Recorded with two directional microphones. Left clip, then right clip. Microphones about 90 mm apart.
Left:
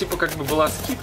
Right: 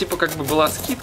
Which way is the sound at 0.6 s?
10° right (ahead or behind).